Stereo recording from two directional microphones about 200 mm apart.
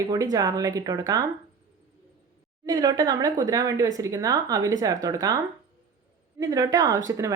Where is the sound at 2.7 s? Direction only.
20° right (ahead or behind).